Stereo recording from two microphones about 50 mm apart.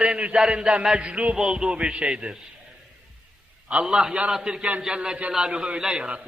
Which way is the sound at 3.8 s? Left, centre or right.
Centre.